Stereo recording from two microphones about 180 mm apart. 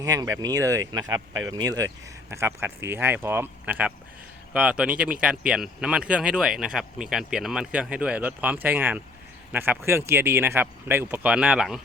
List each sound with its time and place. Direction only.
0.0 s speech: 20° right (ahead or behind); by 11.8 s 5° right (ahead or behind)